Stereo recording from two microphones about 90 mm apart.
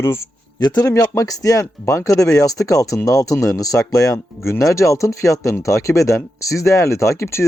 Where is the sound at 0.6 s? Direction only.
50° left (ahead or behind).